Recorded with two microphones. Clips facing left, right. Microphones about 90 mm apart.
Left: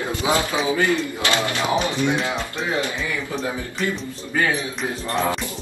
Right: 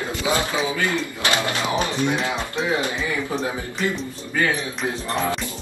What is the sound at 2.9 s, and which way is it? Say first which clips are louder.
Speech: right 2 dB; 30° right (ahead or behind).